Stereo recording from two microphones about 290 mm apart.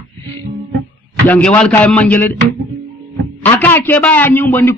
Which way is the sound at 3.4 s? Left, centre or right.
Centre.